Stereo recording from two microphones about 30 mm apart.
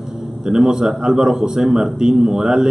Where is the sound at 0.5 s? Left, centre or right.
Centre.